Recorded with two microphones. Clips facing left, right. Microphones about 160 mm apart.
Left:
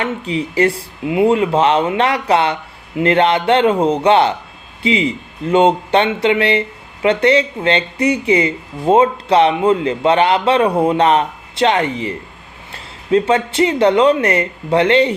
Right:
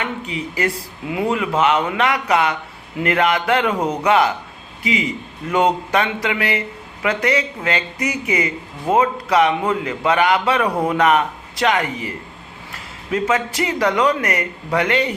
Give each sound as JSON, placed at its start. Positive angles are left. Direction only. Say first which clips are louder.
{"t": 0.0, "sound": "speech", "louder": "left 6 dB", "side_deg": 30}